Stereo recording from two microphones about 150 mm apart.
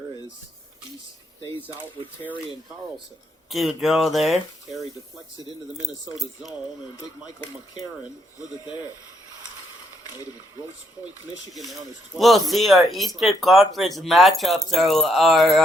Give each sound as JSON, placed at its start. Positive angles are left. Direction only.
{"t": 3.5, "sound": "speech", "side_deg": 0}
{"t": 8.6, "sound": "speech", "side_deg": 30}
{"t": 11.5, "sound": "speech", "side_deg": 0}